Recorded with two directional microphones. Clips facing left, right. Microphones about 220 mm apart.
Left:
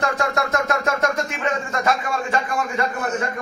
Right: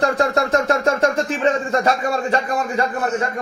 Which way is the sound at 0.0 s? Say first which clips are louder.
Right 4 dB; 35° right (ahead or behind).